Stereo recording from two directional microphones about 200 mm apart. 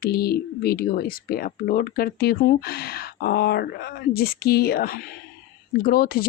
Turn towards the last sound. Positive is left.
turn(degrees=50)  # may be behind; listen again after turning